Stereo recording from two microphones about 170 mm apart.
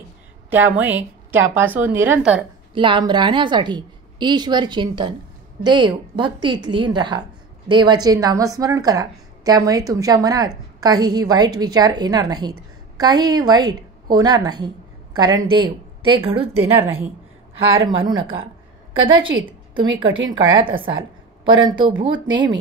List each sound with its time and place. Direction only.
0.5 s a woman's voice: 10° right (ahead or behind)
2.7 s a woman's voice: 30° right (ahead or behind)
16.5 s a woman's voice: 15° right (ahead or behind)
17.8 s a woman's voice: 25° right (ahead or behind)